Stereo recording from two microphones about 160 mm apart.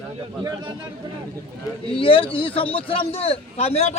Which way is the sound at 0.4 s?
25° right (ahead or behind).